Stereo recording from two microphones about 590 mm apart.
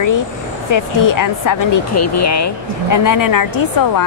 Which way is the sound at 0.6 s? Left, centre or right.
Left.